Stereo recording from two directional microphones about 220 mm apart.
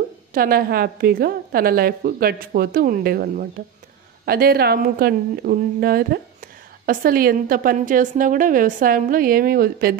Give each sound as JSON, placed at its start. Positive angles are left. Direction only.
{"t": 0.3, "sound": "a woman's voice", "side_deg": -40}